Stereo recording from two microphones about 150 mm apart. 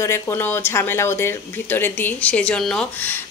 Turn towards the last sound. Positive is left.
turn(degrees=5)  # may be behind; listen again after turning